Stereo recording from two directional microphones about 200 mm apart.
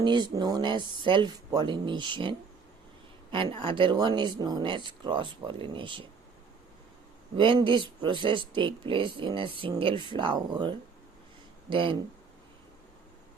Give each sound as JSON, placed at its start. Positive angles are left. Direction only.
{"t": 0.0, "sound": "speech", "side_deg": -20}
{"t": 3.3, "sound": "speech", "side_deg": -25}
{"t": 7.3, "sound": "speech", "side_deg": -25}